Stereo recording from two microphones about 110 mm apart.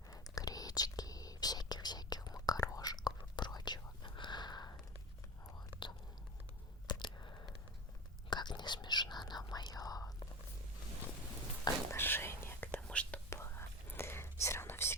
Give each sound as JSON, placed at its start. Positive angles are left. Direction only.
{"t": 0.1, "sound": "whispering", "side_deg": 35}
{"t": 6.8, "sound": "chewing", "side_deg": 40}
{"t": 8.3, "sound": "whispering", "side_deg": 40}
{"t": 11.9, "sound": "whispering", "side_deg": 20}
{"t": 13.3, "sound": "whispering", "side_deg": 25}